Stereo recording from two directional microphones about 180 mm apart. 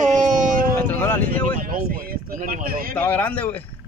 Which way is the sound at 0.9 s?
10° left (ahead or behind).